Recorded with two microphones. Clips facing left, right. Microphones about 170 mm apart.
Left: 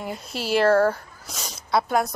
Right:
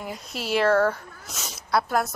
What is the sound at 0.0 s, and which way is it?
Speech, centre (ahead or behind).